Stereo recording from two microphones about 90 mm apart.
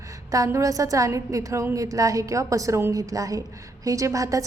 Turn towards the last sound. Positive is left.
turn(degrees=-40)  # may be behind; listen again after turning